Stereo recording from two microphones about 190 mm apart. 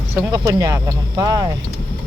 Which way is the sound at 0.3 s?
20° right (ahead or behind).